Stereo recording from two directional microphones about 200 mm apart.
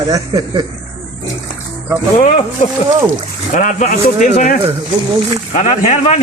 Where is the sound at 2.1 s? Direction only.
35° left (ahead or behind).